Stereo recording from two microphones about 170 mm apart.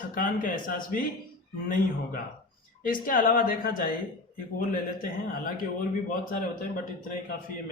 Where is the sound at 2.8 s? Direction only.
55° left (ahead or behind).